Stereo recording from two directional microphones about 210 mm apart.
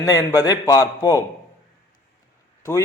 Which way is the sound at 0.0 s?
15° left (ahead or behind).